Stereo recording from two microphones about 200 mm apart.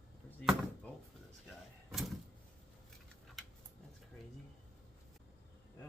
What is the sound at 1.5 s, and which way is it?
Door, centre (ahead or behind).